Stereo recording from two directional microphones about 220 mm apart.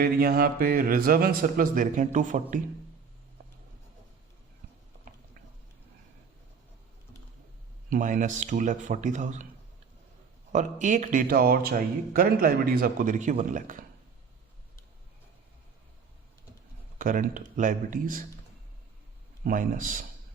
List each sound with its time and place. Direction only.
0.0 s speech: 40° right (ahead or behind)
7.9 s speech: 35° right (ahead or behind)
10.5 s speech: 35° right (ahead or behind)
17.0 s speech: 40° right (ahead or behind)
19.5 s speech: 35° right (ahead or behind)